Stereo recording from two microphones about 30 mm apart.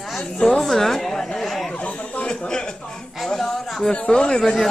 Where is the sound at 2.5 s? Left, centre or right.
Left.